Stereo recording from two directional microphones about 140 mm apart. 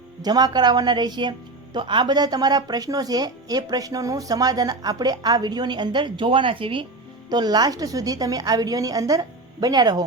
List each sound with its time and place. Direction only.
0.2 s a woman's voice: 30° right (ahead or behind)